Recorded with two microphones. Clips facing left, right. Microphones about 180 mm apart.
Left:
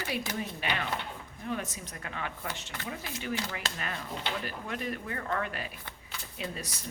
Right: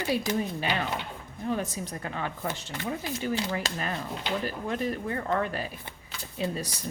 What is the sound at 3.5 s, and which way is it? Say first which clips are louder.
Speech: right 6 dB; 35° right (ahead or behind).